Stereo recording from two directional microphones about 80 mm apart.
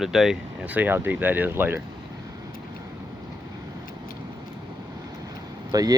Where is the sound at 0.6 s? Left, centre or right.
Right.